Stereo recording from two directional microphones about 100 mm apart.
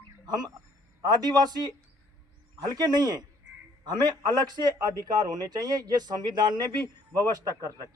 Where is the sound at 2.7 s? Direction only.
45° right (ahead or behind).